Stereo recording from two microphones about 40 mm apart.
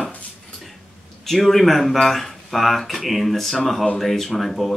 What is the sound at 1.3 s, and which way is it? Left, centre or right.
Speech, centre.